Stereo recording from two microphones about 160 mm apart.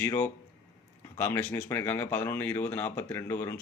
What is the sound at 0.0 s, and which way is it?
A man's voice, 15° left (ahead or behind).